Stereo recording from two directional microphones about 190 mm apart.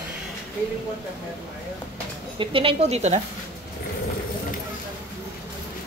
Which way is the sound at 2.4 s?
30° right (ahead or behind).